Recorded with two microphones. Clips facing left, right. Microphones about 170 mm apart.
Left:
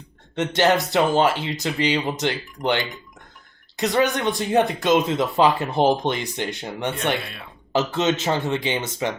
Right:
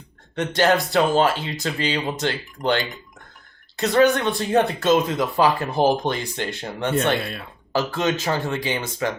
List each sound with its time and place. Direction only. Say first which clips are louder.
0.3 s speech: even; 20° left (ahead or behind)